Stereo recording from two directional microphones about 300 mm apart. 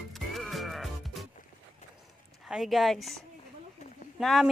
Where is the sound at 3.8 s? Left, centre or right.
Left.